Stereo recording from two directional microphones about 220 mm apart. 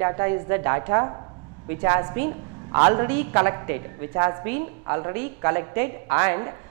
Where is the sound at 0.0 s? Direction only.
15° right (ahead or behind).